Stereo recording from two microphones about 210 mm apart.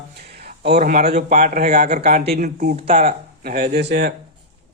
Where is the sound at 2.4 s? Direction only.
35° right (ahead or behind).